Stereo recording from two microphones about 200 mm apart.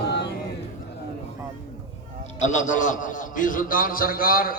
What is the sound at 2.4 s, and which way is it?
A man's voice, 35° left (ahead or behind).